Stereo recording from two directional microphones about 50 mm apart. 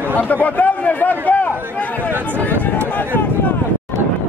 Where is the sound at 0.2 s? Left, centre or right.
Left.